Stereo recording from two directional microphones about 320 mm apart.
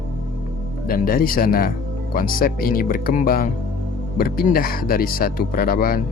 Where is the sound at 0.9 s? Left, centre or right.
Left.